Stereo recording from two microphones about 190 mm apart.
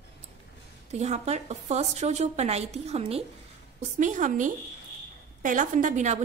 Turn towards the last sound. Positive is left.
turn(degrees=-40)  # may be behind; listen again after turning